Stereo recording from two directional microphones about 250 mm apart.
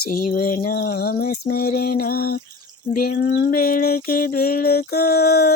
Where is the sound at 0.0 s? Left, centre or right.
Left.